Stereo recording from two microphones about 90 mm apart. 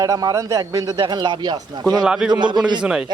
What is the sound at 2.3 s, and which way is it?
Speech, 55° right (ahead or behind).